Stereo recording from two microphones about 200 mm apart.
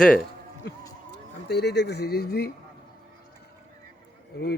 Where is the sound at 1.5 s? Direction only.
55° left (ahead or behind).